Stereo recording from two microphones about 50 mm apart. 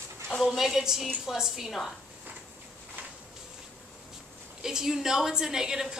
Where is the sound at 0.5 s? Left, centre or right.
Centre.